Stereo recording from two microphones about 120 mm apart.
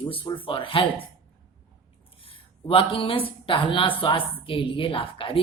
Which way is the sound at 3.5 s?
45° left (ahead or behind).